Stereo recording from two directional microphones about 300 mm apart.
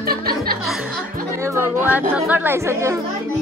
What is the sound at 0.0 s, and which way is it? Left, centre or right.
Music, right.